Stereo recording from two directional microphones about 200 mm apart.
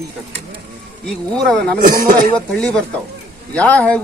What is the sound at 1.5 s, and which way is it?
Speech, 5° left (ahead or behind).